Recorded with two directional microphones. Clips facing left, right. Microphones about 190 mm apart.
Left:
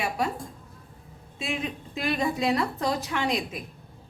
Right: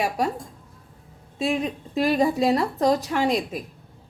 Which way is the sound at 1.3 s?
40° right (ahead or behind).